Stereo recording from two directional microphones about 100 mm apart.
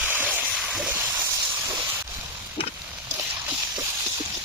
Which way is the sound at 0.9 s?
20° right (ahead or behind).